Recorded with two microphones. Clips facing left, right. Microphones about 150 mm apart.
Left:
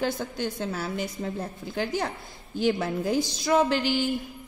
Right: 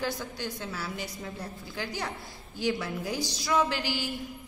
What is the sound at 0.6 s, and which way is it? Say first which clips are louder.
Speech: left 6 dB; 55° left (ahead or behind).